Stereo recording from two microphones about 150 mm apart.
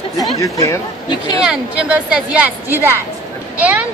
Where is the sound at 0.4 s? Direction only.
20° left (ahead or behind).